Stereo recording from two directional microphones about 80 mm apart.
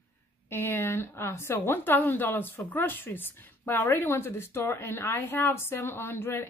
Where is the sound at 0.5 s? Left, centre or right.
Left.